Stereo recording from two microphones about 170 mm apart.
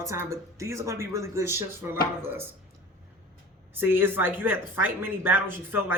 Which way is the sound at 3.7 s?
10° right (ahead or behind).